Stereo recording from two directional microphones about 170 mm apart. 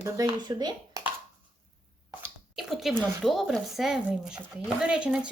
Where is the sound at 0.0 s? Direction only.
20° right (ahead or behind).